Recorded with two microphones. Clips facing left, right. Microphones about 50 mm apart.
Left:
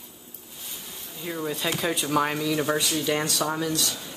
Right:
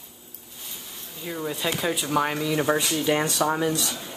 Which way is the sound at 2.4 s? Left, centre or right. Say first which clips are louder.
Right 2 dB; centre.